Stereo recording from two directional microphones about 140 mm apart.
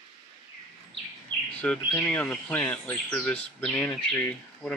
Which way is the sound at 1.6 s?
10° left (ahead or behind).